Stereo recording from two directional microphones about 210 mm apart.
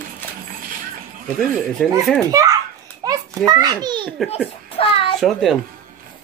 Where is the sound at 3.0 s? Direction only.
20° right (ahead or behind).